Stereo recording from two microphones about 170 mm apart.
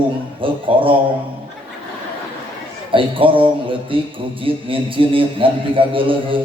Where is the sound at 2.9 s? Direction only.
30° right (ahead or behind).